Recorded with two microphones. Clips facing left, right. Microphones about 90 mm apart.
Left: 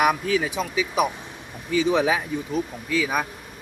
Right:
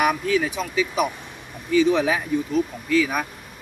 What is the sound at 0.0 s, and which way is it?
Speech, 10° left (ahead or behind).